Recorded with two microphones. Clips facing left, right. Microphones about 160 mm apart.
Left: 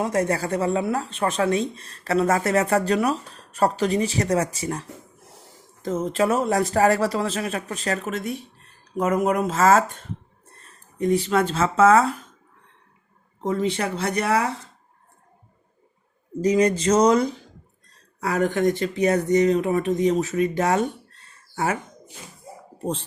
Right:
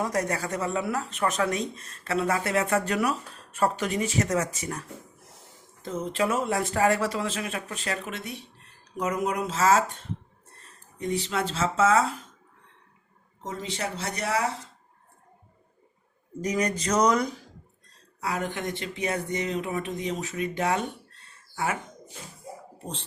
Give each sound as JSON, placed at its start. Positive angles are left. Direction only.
{"t": 0.0, "sound": "speech", "side_deg": 25}
{"t": 5.8, "sound": "speech", "side_deg": 45}
{"t": 10.9, "sound": "speech", "side_deg": 50}
{"t": 13.5, "sound": "speech", "side_deg": 55}
{"t": 16.4, "sound": "speech", "side_deg": 30}
{"t": 18.2, "sound": "speech", "side_deg": 45}